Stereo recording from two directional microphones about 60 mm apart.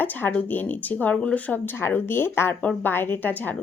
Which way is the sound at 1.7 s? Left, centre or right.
Left.